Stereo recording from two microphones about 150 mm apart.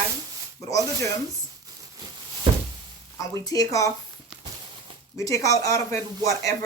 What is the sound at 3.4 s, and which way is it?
Speech, 25° left (ahead or behind).